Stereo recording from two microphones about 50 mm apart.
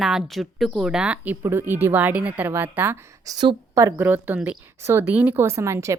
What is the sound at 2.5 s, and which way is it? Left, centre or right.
Speech, right.